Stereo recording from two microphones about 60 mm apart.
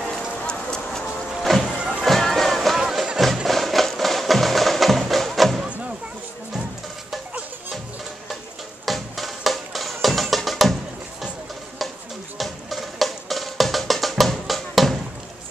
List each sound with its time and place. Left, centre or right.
0.1 s clip-clop: centre
1.3 s music: centre
1.6 s music: centre
2.0 s music: centre
5.6 s a sound: centre
8.8 s music: centre
12.4 s music: centre